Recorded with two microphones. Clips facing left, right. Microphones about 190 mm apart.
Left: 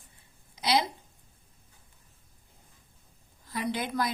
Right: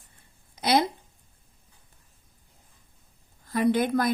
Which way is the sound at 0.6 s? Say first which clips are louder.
Right 4 dB; 50° right (ahead or behind).